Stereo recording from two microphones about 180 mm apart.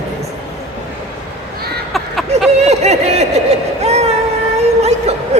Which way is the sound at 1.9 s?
Centre (ahead or behind).